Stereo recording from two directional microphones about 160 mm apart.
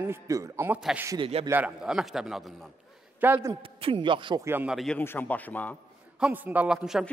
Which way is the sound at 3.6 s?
35° right (ahead or behind).